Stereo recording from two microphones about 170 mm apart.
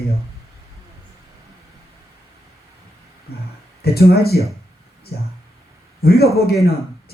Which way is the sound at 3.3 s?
70° left (ahead or behind).